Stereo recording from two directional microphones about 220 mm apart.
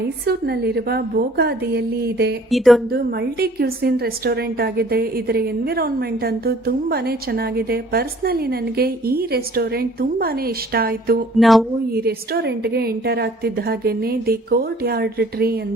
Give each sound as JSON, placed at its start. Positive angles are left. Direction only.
{"t": 0.3, "sound": "a woman's voice", "side_deg": -45}
{"t": 2.5, "sound": "speech", "side_deg": 0}
{"t": 2.9, "sound": "a woman's voice", "side_deg": -45}
{"t": 11.3, "sound": "speech", "side_deg": 0}
{"t": 11.9, "sound": "a woman's voice", "side_deg": -45}